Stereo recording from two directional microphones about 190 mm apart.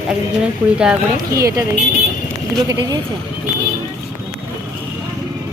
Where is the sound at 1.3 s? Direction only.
15° right (ahead or behind).